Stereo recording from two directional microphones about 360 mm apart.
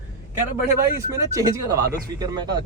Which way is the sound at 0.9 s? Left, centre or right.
Centre.